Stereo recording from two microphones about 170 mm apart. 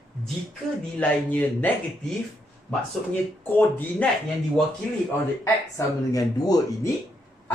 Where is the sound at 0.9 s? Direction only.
10° left (ahead or behind).